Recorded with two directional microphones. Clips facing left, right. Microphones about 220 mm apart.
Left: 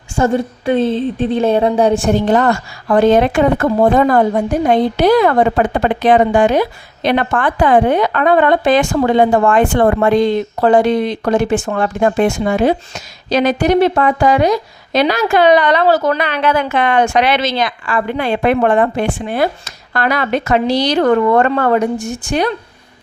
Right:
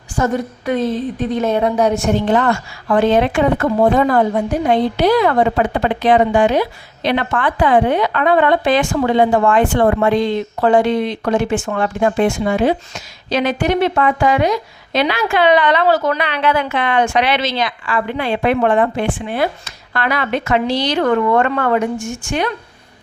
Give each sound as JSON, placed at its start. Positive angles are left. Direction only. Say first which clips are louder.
{"t": 0.2, "sound": "a woman's voice", "louder": "left 3 dB", "side_deg": 30}